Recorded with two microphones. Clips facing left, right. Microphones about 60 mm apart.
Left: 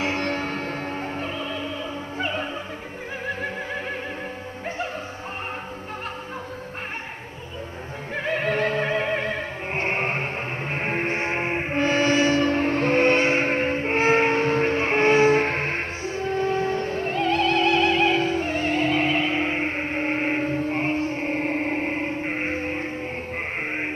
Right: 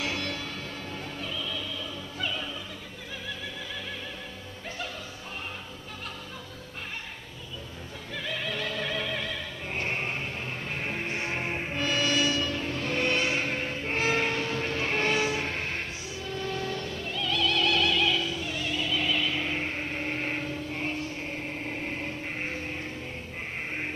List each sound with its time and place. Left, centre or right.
0.0 s opera: left
8.1 s opera: left